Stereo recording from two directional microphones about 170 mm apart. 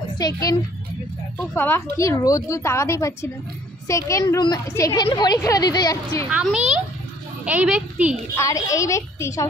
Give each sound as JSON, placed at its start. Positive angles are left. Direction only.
{"t": 0.2, "sound": "a woman's voice", "side_deg": 20}
{"t": 6.3, "sound": "a child's voice", "side_deg": -5}
{"t": 8.4, "sound": "a woman's voice", "side_deg": 20}